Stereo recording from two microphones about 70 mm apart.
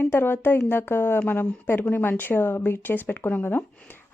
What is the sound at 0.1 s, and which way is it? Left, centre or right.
Speech, left.